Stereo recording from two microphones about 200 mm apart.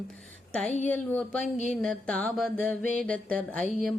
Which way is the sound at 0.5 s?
5° left (ahead or behind).